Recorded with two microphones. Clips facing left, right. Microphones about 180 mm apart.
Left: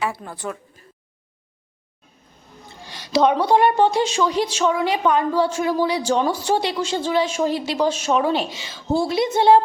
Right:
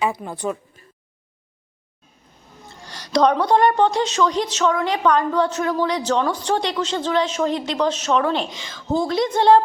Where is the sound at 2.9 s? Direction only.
5° left (ahead or behind).